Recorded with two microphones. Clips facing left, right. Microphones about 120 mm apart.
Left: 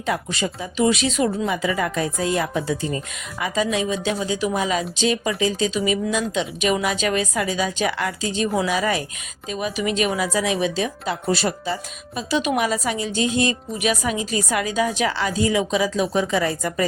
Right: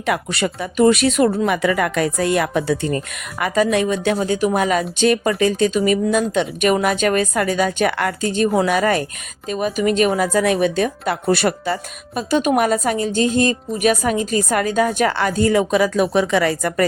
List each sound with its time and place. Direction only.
0.0 s a woman's voice: 65° right (ahead or behind)